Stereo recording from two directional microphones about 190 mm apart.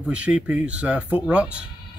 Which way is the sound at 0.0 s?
5° right (ahead or behind).